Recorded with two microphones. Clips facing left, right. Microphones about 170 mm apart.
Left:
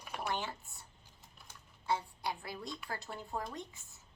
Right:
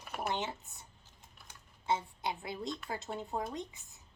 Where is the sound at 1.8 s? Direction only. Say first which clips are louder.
Right 2 dB; 20° right (ahead or behind).